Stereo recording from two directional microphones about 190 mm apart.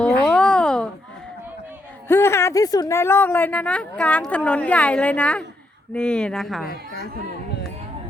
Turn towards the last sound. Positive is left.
turn(degrees=55)  # may be behind; listen again after turning